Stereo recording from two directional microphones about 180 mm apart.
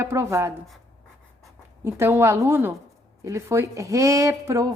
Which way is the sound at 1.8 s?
15° right (ahead or behind).